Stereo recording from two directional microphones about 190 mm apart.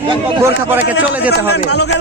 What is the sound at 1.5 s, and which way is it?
Speech, 60° left (ahead or behind).